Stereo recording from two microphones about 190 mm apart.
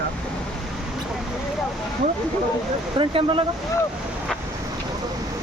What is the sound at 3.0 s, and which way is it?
Speech, 30° right (ahead or behind).